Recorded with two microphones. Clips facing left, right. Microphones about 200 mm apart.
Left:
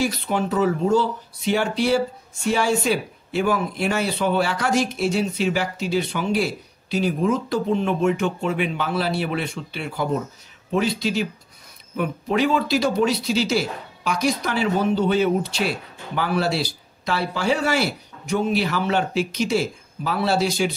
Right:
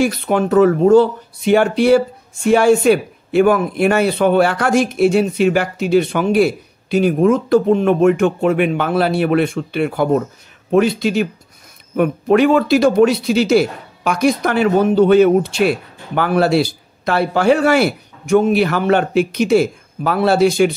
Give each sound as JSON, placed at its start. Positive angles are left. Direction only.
{"t": 0.0, "sound": "speech", "side_deg": -55}